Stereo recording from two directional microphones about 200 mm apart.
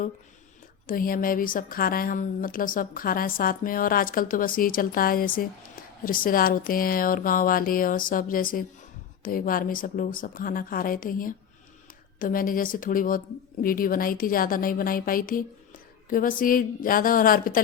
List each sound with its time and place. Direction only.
0.9 s speech: 45° left (ahead or behind)